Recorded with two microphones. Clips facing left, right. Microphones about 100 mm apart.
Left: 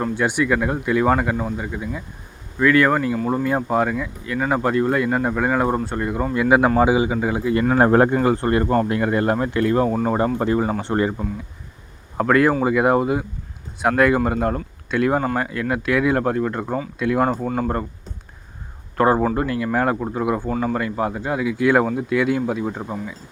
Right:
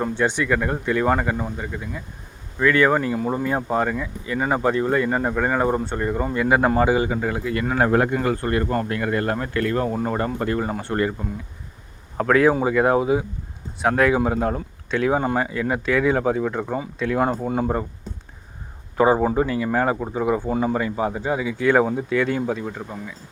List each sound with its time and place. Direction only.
0.1 s a man's voice: 10° left (ahead or behind)
7.8 s speech: 35° left (ahead or behind)
8.1 s speech: 25° left (ahead or behind)
12.1 s speech: centre (ahead or behind)
17.2 s speech: 5° right (ahead or behind)
18.9 s speech: centre (ahead or behind)
19.5 s speech: centre (ahead or behind)
20.5 s speech: 15° right (ahead or behind)
20.7 s speech: 5° right (ahead or behind)
22.6 s speech: 20° left (ahead or behind)